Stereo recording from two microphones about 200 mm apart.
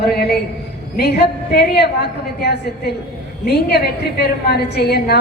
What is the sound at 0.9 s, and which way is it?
Speech, 55° left (ahead or behind).